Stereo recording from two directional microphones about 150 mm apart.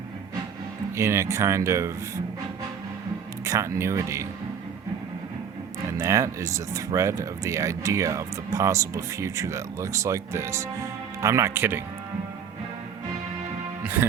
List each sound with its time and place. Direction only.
0.9 s speech: 20° right (ahead or behind)
3.4 s speech: 20° right (ahead or behind)
6.0 s speech: 20° right (ahead or behind)